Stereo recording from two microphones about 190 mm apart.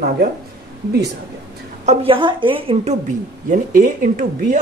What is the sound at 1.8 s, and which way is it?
A woman's voice, 30° right (ahead or behind).